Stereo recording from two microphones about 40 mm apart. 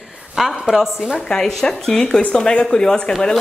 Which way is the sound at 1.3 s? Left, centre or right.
Centre.